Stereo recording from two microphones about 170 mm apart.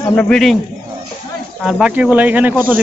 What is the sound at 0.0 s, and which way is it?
Speech, 5° left (ahead or behind).